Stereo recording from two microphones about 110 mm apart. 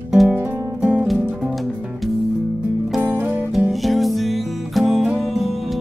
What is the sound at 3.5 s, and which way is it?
Music, centre (ahead or behind).